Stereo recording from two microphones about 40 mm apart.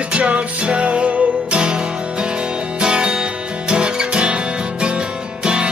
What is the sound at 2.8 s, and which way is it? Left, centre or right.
Music, right.